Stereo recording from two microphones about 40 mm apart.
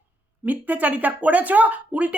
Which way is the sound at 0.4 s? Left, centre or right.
Right.